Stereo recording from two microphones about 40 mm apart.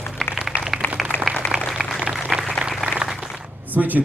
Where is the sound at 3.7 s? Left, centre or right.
Right.